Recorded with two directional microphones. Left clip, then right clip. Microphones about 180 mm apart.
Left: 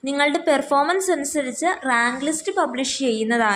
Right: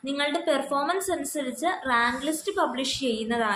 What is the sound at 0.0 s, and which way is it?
A woman's voice, 35° left (ahead or behind).